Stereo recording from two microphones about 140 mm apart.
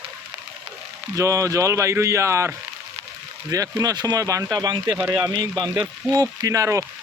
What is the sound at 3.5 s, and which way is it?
Speech, 25° right (ahead or behind).